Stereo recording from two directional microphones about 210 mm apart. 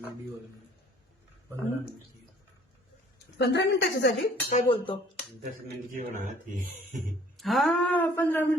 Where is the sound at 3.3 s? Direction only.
55° left (ahead or behind).